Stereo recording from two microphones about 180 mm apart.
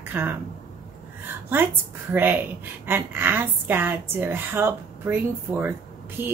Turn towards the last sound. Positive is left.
turn(degrees=-15)  # may be behind; listen again after turning